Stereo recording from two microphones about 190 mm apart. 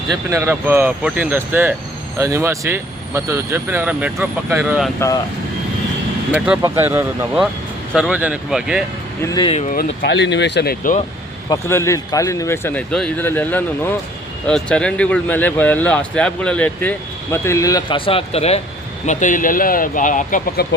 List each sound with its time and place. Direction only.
0.1 s speech: 15° right (ahead or behind)
6.3 s speech: 5° right (ahead or behind)
9.2 s speech: 20° left (ahead or behind)
9.6 s speech: 55° left (ahead or behind)
11.4 s speech: 15° left (ahead or behind); by 20.7 s 45° left (ahead or behind)